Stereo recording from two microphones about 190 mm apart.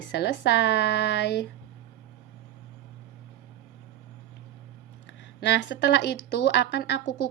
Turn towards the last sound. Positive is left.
turn(degrees=60)  # may be behind; listen again after turning